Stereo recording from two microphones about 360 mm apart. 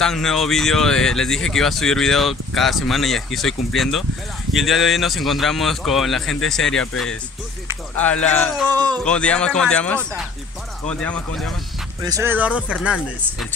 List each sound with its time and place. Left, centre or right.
0.0 s speech: centre
8.6 s speech: centre
9.0 s speech: centre
12.0 s speech: centre